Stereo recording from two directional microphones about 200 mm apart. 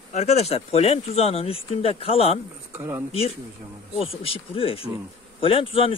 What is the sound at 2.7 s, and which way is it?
Speech, 15° right (ahead or behind).